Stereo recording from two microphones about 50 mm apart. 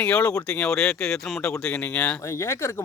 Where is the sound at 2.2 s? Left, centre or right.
Left.